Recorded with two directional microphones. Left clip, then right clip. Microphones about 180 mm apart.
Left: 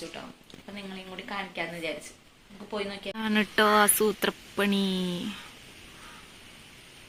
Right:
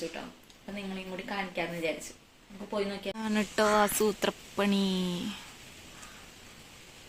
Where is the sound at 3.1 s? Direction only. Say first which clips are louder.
Left 5 dB; centre (ahead or behind).